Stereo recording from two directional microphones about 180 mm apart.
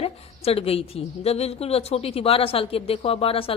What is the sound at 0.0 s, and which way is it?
A woman's voice, 35° left (ahead or behind).